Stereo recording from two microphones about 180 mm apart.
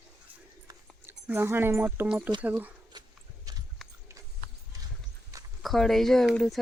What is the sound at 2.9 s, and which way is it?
Horse, 25° right (ahead or behind).